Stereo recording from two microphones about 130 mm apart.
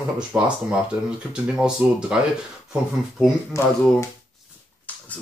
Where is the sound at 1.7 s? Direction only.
5° right (ahead or behind).